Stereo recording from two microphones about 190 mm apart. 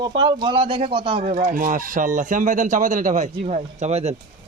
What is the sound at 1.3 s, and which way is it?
A man's voice, 40° right (ahead or behind).